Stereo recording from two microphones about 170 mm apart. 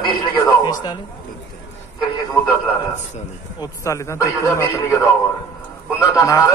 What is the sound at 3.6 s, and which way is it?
A man's voice, 20° left (ahead or behind).